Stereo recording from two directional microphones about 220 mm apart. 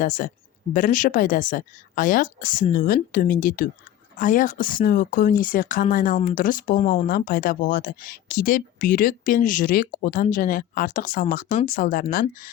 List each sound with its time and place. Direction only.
0.0 s speech: 40° left (ahead or behind)
6.7 s speech: 25° left (ahead or behind)
7.1 s speech: 40° left (ahead or behind)